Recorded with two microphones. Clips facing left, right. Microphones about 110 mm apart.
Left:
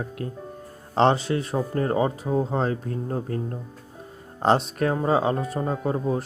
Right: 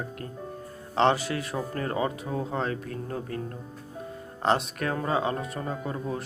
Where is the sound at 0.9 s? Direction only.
30° left (ahead or behind).